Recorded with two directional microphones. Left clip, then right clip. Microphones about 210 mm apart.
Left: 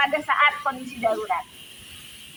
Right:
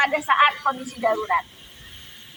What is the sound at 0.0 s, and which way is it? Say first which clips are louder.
A woman's voice: right 2 dB; 5° left (ahead or behind).